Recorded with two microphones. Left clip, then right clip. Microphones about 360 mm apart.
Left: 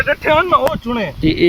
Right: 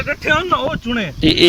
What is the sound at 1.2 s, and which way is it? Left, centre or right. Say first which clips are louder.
Speech: right 3 dB; right.